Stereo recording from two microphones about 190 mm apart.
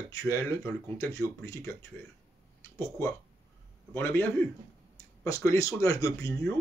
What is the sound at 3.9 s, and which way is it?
Speech, 10° left (ahead or behind).